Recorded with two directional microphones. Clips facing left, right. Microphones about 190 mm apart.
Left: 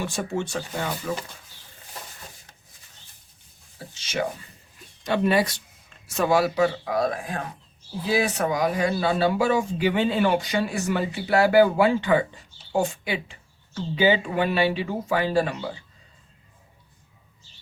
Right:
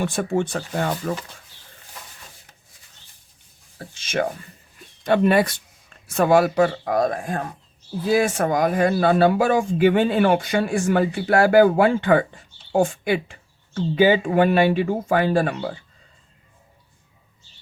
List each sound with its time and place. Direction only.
0.0 s speech: 55° right (ahead or behind)
3.9 s speech: 50° right (ahead or behind)